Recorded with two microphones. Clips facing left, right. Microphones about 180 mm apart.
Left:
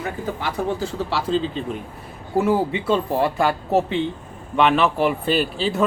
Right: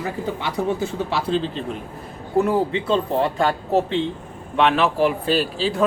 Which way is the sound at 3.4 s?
5° left (ahead or behind).